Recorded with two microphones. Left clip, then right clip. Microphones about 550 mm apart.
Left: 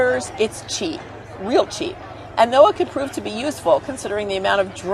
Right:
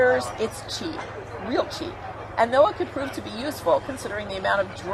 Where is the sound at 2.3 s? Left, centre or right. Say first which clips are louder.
Left 6 dB; left.